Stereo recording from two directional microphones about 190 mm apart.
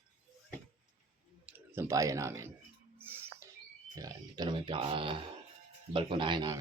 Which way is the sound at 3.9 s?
20° right (ahead or behind).